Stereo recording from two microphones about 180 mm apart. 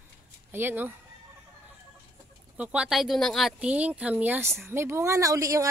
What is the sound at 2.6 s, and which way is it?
Speech, 5° right (ahead or behind).